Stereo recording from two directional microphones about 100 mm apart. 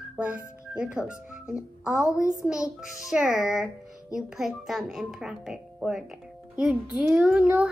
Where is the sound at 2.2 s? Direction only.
30° left (ahead or behind).